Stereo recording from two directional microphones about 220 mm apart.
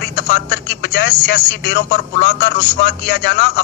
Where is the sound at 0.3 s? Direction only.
50° left (ahead or behind).